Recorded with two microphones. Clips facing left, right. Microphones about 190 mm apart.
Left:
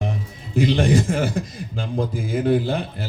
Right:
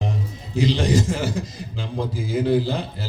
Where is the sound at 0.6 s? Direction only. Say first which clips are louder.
Left 2 dB; 55° left (ahead or behind).